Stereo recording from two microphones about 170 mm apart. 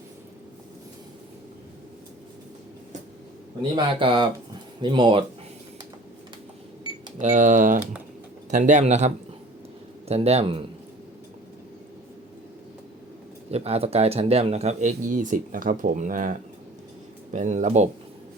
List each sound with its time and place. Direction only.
4.0 s a man's voice: 30° right (ahead or behind)
6.8 s cash register: 25° right (ahead or behind)
7.2 s a man's voice: 45° right (ahead or behind)
13.5 s speech: 35° right (ahead or behind)